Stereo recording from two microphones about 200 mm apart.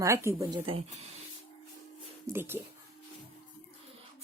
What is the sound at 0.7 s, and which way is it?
Speech, 30° right (ahead or behind).